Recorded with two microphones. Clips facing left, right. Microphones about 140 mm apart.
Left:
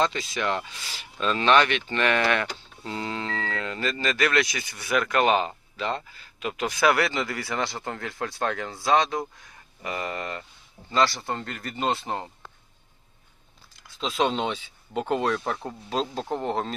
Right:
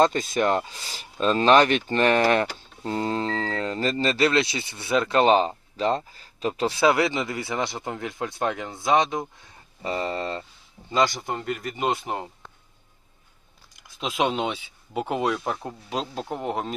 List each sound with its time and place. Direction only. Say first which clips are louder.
0.0 s speech: right 5 dB; 45° right (ahead or behind); by 10.4 s 30° right (ahead or behind)
10.8 s speech: right 1 dB; 20° right (ahead or behind)
13.7 s speech: even; 15° right (ahead or behind)